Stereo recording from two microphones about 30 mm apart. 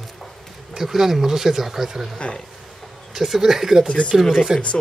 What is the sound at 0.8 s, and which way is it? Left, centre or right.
Speech, centre.